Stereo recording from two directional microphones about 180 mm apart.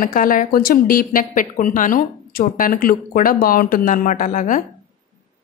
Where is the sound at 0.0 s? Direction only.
50° left (ahead or behind).